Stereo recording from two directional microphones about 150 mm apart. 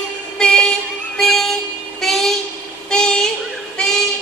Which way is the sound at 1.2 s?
Centre (ahead or behind).